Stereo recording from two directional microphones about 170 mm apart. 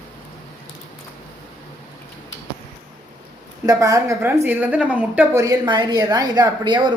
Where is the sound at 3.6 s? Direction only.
20° right (ahead or behind).